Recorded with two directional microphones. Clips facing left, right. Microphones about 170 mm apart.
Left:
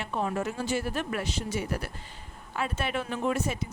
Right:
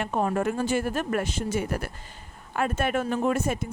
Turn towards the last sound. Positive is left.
turn(degrees=-50)  # may be behind; listen again after turning